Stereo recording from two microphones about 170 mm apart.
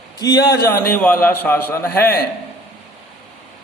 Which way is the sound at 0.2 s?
20° left (ahead or behind).